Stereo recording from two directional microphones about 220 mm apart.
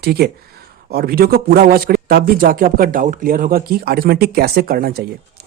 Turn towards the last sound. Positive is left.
turn(degrees=-45)  # may be behind; listen again after turning